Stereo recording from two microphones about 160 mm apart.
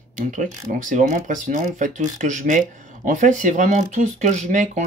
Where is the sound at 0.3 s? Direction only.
55° right (ahead or behind).